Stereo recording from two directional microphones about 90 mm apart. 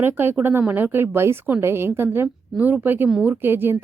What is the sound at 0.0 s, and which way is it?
A woman's voice, 25° right (ahead or behind).